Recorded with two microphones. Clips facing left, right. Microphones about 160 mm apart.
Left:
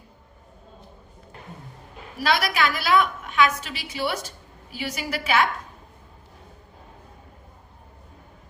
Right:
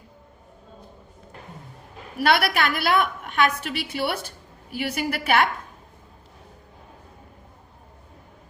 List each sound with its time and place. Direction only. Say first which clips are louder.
2.1 s a woman's voice: right 2 dB; 60° right (ahead or behind)